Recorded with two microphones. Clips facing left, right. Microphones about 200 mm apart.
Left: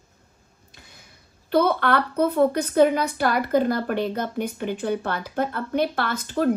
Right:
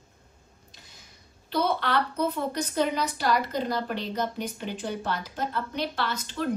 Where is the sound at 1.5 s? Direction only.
55° left (ahead or behind).